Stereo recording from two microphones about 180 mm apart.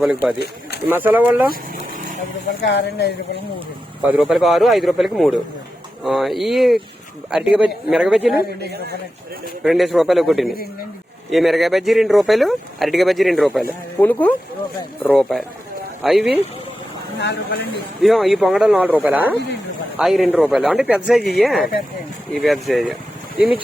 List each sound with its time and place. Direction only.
0.0 s speech: 5° right (ahead or behind)
1.7 s vehicle: 50° right (ahead or behind)
2.5 s speech: 65° left (ahead or behind)
4.0 s speech: 5° right (ahead or behind)
8.7 s a man's voice: 65° right (ahead or behind)
9.6 s speech: centre (ahead or behind)
10.5 s speech: 55° left (ahead or behind)
11.3 s speech: centre (ahead or behind)
17.2 s speech: 65° left (ahead or behind)
18.0 s speech: centre (ahead or behind)